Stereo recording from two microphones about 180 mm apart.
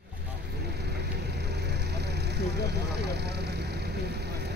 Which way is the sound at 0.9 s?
65° right (ahead or behind).